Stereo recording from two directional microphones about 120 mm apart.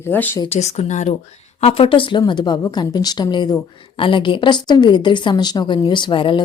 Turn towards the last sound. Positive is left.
turn(degrees=45)  # may be behind; listen again after turning